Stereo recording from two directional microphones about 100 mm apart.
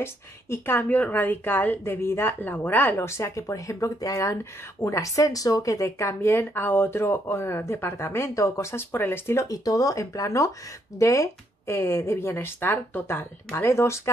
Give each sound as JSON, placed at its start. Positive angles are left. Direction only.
{"t": 0.0, "sound": "speech", "side_deg": 25}